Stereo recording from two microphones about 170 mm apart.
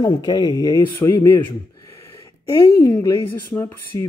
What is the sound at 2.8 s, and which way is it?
Speech, 20° left (ahead or behind).